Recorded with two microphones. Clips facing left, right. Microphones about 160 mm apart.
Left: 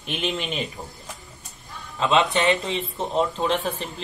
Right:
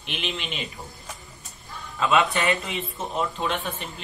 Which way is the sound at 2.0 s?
20° left (ahead or behind).